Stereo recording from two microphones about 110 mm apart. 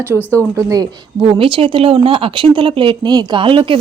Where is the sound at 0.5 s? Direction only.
30° right (ahead or behind).